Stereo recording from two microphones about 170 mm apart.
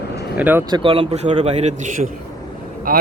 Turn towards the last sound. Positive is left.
turn(degrees=-55)  # may be behind; listen again after turning